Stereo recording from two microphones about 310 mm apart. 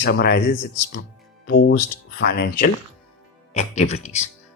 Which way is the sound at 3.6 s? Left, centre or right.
Left.